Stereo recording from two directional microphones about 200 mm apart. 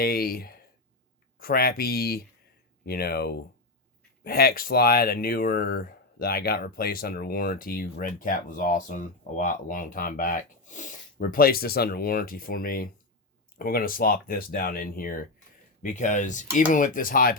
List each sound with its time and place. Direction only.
0.0 s speech: 50° left (ahead or behind)